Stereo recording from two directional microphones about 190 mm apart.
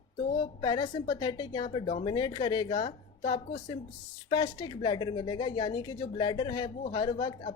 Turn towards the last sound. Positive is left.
turn(degrees=25)  # may be behind; listen again after turning